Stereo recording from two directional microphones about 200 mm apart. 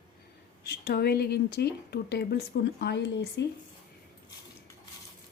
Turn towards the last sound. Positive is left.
turn(degrees=60)  # may be behind; listen again after turning